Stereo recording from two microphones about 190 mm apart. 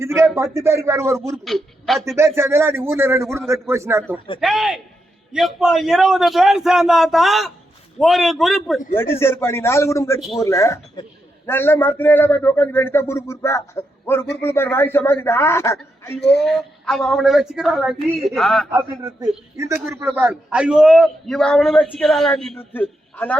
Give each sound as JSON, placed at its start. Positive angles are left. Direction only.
{"t": 0.0, "sound": "a man's voice", "side_deg": -15}
{"t": 1.5, "sound": "speech", "side_deg": 0}
{"t": 2.1, "sound": "a man's voice", "side_deg": -15}
{"t": 4.4, "sound": "a man's voice", "side_deg": 0}
{"t": 9.0, "sound": "a man's voice", "side_deg": 15}
{"t": 10.2, "sound": "a man's voice", "side_deg": 0}
{"t": 10.4, "sound": "a man's voice", "side_deg": 15}
{"t": 16.4, "sound": "a man's voice", "side_deg": 0}
{"t": 18.7, "sound": "a man's voice", "side_deg": -15}